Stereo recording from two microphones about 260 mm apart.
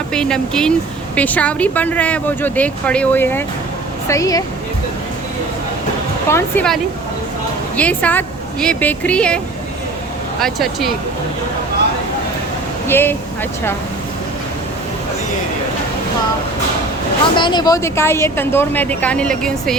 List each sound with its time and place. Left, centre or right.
0.1 s a woman's voice: centre
6.2 s a woman's voice: centre
7.8 s speech: centre
10.4 s speech: centre
12.9 s a woman's voice: centre
17.3 s a woman's voice: centre